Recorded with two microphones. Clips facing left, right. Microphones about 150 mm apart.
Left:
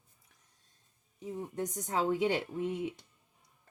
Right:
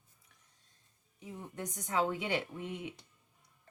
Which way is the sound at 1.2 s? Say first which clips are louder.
Left 6 dB; 40° left (ahead or behind).